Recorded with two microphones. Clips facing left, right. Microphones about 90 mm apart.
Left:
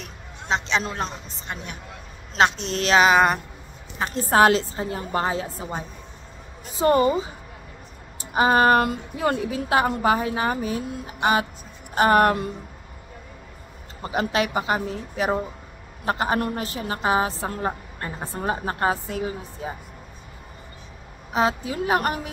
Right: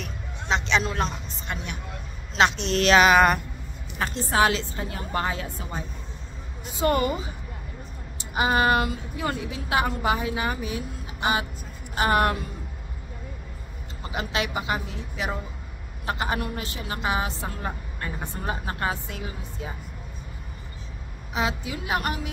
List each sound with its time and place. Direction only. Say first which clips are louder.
0.5 s a woman's voice: even; 35° left (ahead or behind)
2.3 s a woman's voice: left 1 dB; 40° left (ahead or behind); by 3.3 s 25° left (ahead or behind)
4.1 s a woman's voice: left 6 dB; 40° left (ahead or behind)
8.4 s a woman's voice: left 4 dB; 40° left (ahead or behind)
14.0 s a woman's voice: left 5 dB; 40° left (ahead or behind)
21.3 s a woman's voice: left 5 dB; 40° left (ahead or behind)